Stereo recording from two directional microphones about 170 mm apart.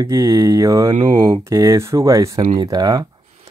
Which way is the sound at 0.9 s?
30° right (ahead or behind).